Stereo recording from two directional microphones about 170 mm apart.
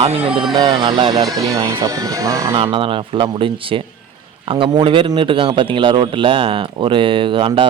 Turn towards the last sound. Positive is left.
turn(degrees=-30)  # may be behind; listen again after turning